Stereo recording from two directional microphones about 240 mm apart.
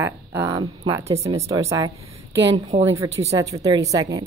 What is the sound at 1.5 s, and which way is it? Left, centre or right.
Speech, centre.